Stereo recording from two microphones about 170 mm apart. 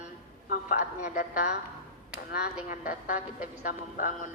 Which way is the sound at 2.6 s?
55° left (ahead or behind).